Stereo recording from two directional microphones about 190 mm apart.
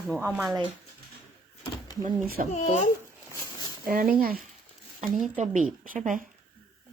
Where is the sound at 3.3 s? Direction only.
15° left (ahead or behind).